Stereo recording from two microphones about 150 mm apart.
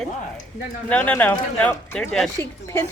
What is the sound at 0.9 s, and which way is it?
Speech, 10° left (ahead or behind).